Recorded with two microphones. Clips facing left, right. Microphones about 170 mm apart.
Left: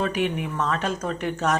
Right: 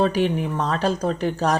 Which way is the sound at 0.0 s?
35° right (ahead or behind).